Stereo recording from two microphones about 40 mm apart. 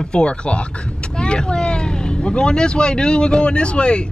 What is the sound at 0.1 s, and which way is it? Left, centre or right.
Speech, left.